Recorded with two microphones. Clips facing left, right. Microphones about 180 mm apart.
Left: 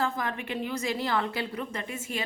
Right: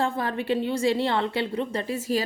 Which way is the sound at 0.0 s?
30° right (ahead or behind).